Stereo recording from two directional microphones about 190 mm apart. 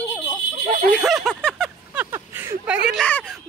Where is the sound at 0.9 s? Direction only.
Centre (ahead or behind).